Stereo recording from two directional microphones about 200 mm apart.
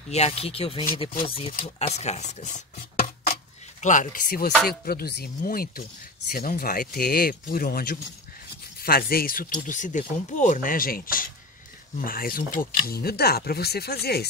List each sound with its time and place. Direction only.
0.1 s speech: 30° left (ahead or behind); by 14.2 s 50° left (ahead or behind)